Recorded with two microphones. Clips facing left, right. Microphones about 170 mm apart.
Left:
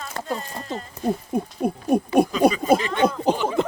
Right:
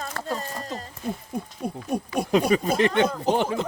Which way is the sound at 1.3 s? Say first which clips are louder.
Left 7 dB; 60° left (ahead or behind).